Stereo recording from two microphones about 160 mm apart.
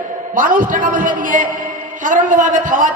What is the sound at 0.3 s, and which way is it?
A woman's voice, 60° right (ahead or behind).